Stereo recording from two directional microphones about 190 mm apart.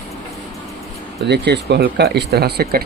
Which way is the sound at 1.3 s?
65° right (ahead or behind).